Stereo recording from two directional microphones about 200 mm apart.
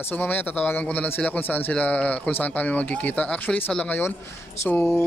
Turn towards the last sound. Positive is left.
turn(degrees=10)  # may be behind; listen again after turning